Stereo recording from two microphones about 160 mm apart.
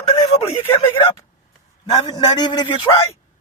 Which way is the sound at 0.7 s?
30° left (ahead or behind).